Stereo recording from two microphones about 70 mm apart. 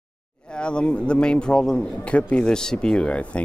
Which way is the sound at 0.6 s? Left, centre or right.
Centre.